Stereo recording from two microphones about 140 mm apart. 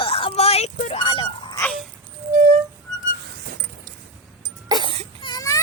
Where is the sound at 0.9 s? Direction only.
35° left (ahead or behind).